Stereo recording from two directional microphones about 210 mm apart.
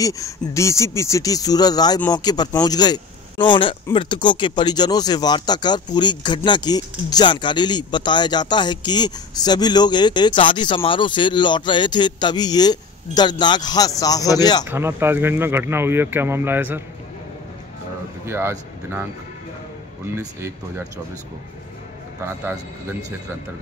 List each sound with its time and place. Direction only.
0.0 s speech: 15° left (ahead or behind)
14.7 s speech: 10° right (ahead or behind)
18.2 s speech: 10° right (ahead or behind)
20.2 s speech: 10° right (ahead or behind)